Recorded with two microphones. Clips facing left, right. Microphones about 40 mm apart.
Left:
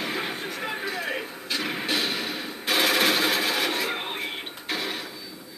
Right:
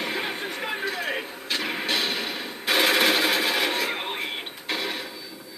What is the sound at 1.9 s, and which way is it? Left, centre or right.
Music, right.